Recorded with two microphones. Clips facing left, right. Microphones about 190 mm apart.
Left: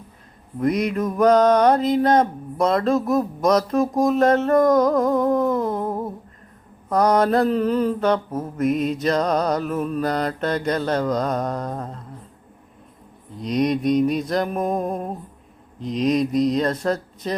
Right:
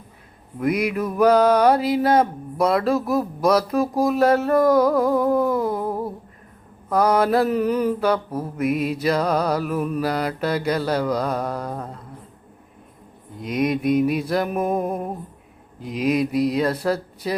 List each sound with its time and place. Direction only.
0.6 s mantra: 5° right (ahead or behind)
4.0 s a sound: 5° right (ahead or behind)
5.8 s humming: 20° left (ahead or behind)
6.9 s mantra: 5° right (ahead or behind)
13.4 s music: 5° right (ahead or behind)
17.2 s mantra: 5° right (ahead or behind)